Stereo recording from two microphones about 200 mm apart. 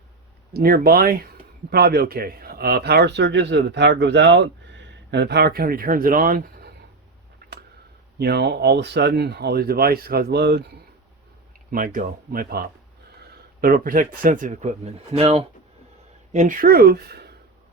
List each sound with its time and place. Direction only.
0.5 s speech: 50° right (ahead or behind)
8.2 s speech: 55° right (ahead or behind)
11.7 s speech: 45° right (ahead or behind)